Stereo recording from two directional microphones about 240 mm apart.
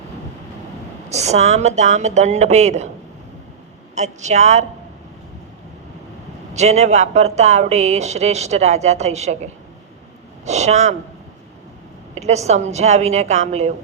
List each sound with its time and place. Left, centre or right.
1.1 s speech: right
3.9 s speech: right
6.5 s speech: right
12.1 s speech: right